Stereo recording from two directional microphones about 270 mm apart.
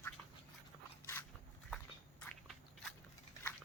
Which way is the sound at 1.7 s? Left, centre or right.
Centre.